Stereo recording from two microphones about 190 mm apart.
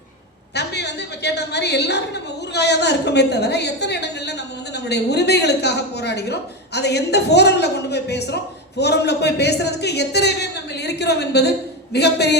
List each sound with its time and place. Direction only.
0.5 s a woman's voice: 60° left (ahead or behind)